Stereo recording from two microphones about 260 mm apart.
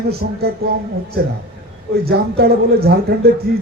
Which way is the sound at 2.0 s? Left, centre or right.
Right.